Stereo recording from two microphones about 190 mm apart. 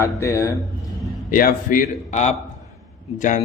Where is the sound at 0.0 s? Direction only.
15° left (ahead or behind).